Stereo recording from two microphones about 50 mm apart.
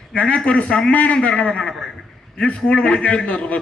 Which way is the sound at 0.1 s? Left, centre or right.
Left.